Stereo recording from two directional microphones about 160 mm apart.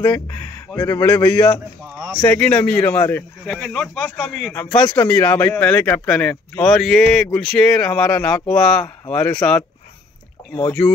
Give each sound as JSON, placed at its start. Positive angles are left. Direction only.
{"t": 0.7, "sound": "speech", "side_deg": 20}
{"t": 1.3, "sound": "speech", "side_deg": 10}
{"t": 4.6, "sound": "speech", "side_deg": 15}